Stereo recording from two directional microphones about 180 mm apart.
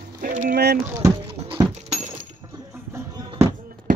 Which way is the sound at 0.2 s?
45° right (ahead or behind).